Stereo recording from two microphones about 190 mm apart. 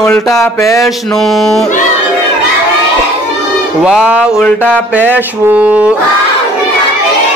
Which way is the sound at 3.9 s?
5° right (ahead or behind).